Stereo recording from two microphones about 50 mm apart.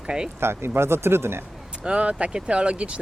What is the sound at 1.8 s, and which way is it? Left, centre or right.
Speech, right.